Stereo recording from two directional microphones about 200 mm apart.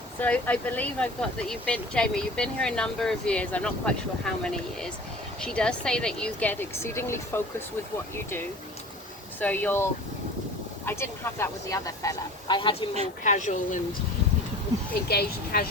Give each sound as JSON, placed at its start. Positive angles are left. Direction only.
{"t": 0.2, "sound": "speech", "side_deg": 10}
{"t": 9.4, "sound": "speech", "side_deg": 10}
{"t": 13.2, "sound": "speech", "side_deg": 35}
{"t": 15.1, "sound": "speech", "side_deg": 50}